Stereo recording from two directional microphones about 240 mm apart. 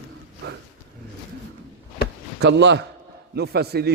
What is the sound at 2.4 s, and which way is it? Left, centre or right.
A man's voice, right.